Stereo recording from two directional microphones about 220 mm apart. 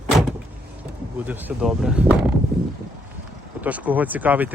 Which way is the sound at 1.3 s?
5° right (ahead or behind).